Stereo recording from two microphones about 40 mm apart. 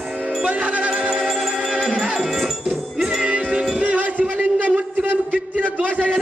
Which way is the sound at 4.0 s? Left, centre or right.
Right.